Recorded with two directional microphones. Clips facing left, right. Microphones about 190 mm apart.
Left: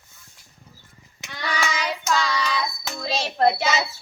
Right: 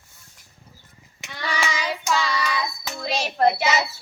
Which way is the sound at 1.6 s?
5° right (ahead or behind).